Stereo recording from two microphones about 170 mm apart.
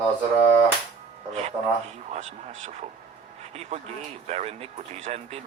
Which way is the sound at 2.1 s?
45° right (ahead or behind).